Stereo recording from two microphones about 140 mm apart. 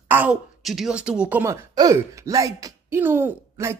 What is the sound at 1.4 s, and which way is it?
Speech, 20° right (ahead or behind).